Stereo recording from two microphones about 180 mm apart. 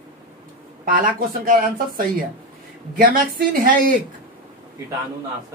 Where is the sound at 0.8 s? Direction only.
50° right (ahead or behind).